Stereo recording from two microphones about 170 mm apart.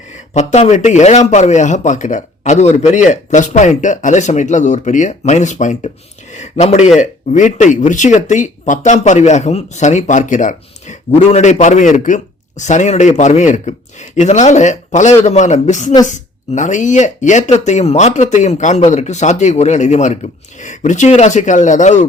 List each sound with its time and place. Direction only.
0.1 s speech: 40° left (ahead or behind)